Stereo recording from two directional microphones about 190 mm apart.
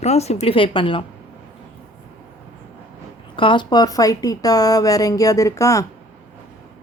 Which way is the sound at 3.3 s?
25° left (ahead or behind).